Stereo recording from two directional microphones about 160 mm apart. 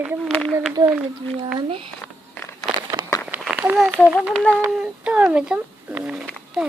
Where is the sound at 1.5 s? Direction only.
35° right (ahead or behind).